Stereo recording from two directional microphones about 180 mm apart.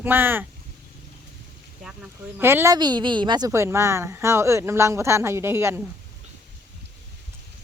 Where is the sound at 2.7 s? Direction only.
25° right (ahead or behind).